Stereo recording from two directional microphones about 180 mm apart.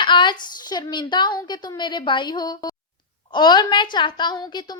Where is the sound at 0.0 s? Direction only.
25° left (ahead or behind).